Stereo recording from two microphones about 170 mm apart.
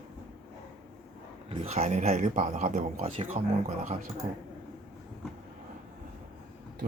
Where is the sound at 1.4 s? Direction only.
35° right (ahead or behind).